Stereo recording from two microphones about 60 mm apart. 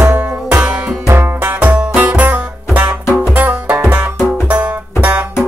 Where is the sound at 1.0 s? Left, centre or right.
Right.